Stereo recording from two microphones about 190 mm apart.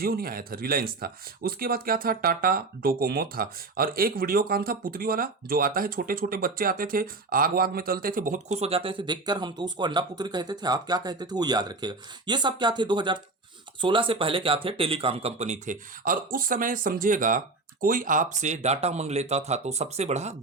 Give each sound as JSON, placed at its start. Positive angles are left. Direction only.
{"t": 0.0, "sound": "speech", "side_deg": -50}